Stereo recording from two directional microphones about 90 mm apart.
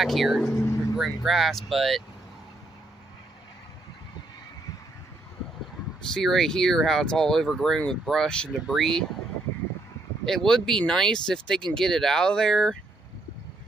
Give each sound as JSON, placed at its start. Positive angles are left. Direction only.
{"t": 0.0, "sound": "speech", "side_deg": 0}
{"t": 0.6, "sound": "vehicle", "side_deg": 30}
{"t": 0.9, "sound": "speech", "side_deg": 0}
{"t": 6.1, "sound": "speech", "side_deg": 5}
{"t": 10.2, "sound": "speech", "side_deg": 5}